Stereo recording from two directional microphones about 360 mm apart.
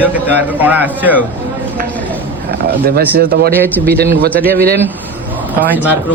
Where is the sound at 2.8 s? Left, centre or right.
Right.